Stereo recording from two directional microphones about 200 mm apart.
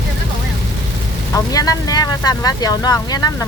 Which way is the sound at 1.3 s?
20° left (ahead or behind).